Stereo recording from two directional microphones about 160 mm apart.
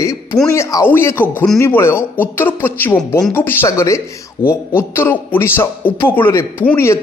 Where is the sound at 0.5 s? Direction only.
20° left (ahead or behind).